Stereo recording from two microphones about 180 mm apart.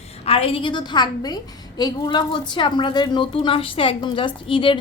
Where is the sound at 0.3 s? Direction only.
30° left (ahead or behind).